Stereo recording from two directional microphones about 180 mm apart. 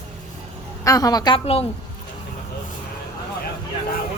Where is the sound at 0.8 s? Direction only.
20° left (ahead or behind).